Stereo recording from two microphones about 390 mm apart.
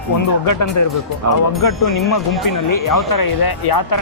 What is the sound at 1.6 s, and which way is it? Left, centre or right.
Speech, left.